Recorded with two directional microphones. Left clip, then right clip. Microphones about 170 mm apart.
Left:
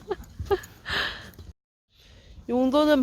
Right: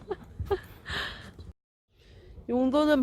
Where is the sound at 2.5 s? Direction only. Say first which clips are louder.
Left 3 dB; 10° left (ahead or behind).